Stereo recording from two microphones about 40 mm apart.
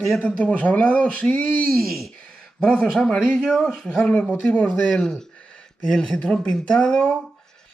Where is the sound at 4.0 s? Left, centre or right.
Left.